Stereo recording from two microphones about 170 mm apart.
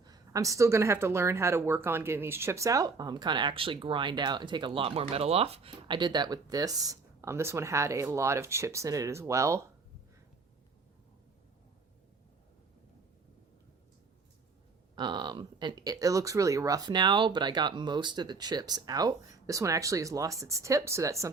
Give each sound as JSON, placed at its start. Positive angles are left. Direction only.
{"t": 0.0, "sound": "speech", "side_deg": -20}
{"t": 14.9, "sound": "speech", "side_deg": -25}